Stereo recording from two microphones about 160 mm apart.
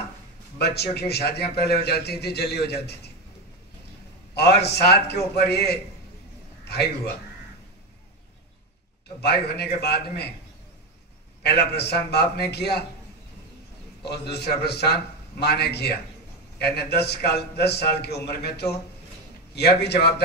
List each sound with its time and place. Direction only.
0.6 s a man's voice: 90° left
4.4 s a man's voice: 90° left
6.6 s a sound: 90° left
9.2 s a man's voice: 90° left
11.4 s a man's voice: 90° left
14.0 s a man's voice: 90° left